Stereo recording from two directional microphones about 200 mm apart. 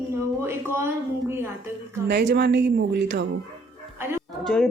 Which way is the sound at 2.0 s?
60° right (ahead or behind).